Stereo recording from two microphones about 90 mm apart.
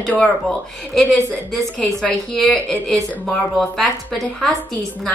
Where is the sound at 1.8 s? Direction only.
15° left (ahead or behind).